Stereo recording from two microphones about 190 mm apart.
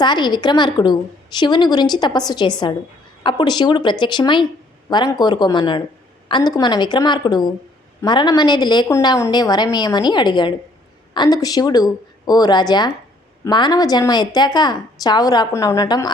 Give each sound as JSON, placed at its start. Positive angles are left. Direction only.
{"t": 0.0, "sound": "a woman's voice", "side_deg": 25}